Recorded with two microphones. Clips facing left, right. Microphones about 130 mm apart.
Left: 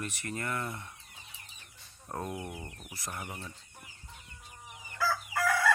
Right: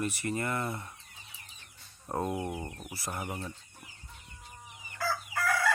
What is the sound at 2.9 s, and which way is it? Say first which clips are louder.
Speech: right 4 dB; 10° right (ahead or behind).